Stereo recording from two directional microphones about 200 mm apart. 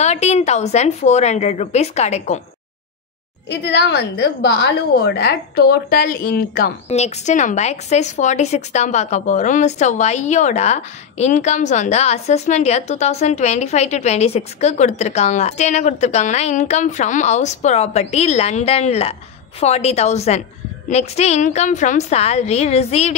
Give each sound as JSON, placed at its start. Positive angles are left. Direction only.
{"t": 0.0, "sound": "a woman's voice", "side_deg": 35}
{"t": 3.4, "sound": "a woman's voice", "side_deg": 55}
{"t": 6.9, "sound": "a woman's voice", "side_deg": 35}